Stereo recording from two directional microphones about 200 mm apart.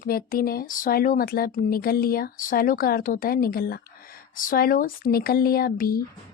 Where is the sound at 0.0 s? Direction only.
45° left (ahead or behind).